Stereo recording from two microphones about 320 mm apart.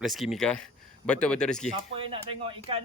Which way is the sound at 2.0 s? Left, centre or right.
Centre.